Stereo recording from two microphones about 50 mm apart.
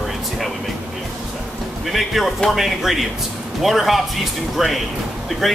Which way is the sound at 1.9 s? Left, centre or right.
Centre.